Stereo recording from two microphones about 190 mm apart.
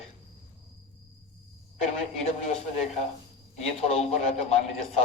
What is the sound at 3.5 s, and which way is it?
A man's voice, 35° left (ahead or behind).